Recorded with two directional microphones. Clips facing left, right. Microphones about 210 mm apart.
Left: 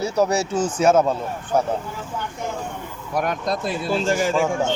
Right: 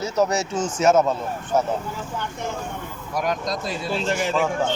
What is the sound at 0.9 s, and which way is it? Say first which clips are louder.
Speech: even; 10° left (ahead or behind).